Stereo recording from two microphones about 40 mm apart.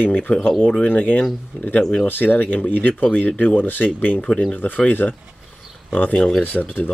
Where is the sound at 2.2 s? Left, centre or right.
Left.